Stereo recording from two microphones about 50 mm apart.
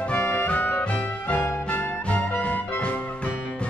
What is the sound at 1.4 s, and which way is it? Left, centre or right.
Music, left.